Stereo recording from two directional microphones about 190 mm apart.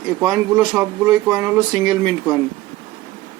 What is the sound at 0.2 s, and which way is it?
Speech, 5° right (ahead or behind).